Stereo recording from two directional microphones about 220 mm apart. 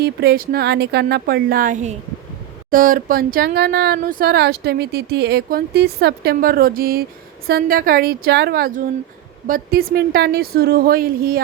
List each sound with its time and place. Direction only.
0.0 s speech: 45° right (ahead or behind)